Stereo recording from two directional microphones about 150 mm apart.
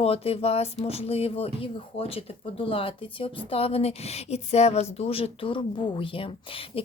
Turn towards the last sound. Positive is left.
turn(degrees=35)  # may be behind; listen again after turning